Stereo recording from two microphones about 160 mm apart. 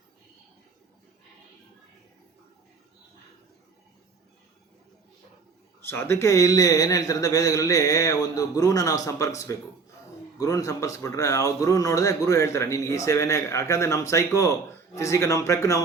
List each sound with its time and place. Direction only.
5.8 s speech: 15° left (ahead or behind)